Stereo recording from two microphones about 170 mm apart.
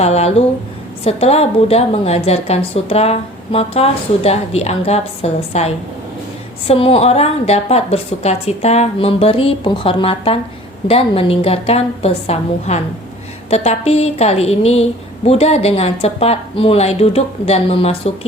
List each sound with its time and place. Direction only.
0.0 s a woman's voice: 40° left (ahead or behind)